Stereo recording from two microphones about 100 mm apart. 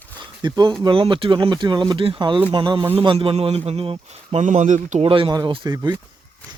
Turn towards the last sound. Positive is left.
turn(degrees=-40)  # may be behind; listen again after turning